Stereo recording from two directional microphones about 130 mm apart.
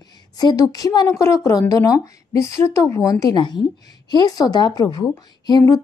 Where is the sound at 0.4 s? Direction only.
30° left (ahead or behind).